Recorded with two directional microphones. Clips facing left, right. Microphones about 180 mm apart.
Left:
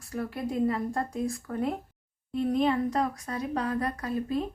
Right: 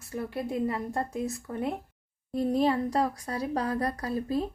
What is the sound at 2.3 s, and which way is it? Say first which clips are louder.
A woman's voice: even; 35° right (ahead or behind).